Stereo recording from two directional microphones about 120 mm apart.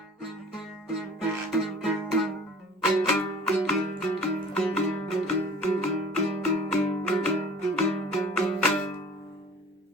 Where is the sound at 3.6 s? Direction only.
5° left (ahead or behind).